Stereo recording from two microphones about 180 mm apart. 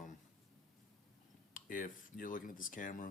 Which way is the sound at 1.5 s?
50° left (ahead or behind).